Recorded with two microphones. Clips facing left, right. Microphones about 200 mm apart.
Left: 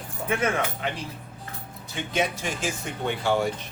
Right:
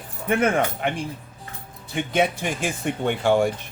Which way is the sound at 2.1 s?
55° right (ahead or behind).